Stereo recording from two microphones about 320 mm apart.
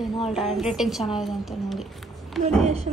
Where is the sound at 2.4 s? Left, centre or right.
Right.